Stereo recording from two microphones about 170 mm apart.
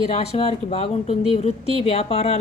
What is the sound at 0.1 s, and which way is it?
Speech, 35° left (ahead or behind).